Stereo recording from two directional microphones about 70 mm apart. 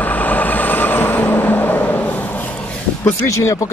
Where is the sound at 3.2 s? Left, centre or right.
Left.